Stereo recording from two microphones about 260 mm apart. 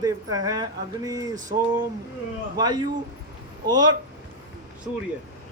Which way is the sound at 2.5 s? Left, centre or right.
Centre.